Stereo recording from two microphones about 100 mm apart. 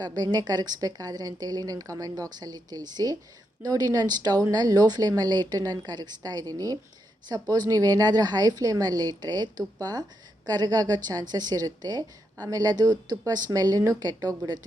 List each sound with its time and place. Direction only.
0.0 s a woman's voice: 45° right (ahead or behind)